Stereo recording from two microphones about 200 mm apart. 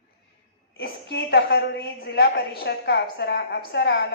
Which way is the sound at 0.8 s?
55° left (ahead or behind).